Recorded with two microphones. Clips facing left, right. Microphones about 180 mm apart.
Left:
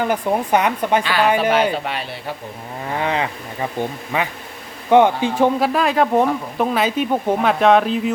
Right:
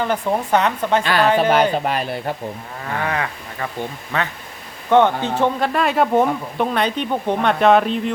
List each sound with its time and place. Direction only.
0.0 s speech: 10° left (ahead or behind)
1.4 s speech: 45° right (ahead or behind)
3.0 s speech: 20° left (ahead or behind); by 8.1 s centre (ahead or behind)